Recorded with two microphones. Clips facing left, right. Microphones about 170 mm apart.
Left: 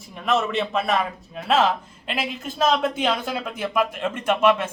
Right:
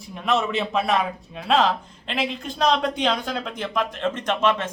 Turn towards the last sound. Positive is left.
turn(degrees=10)  # may be behind; listen again after turning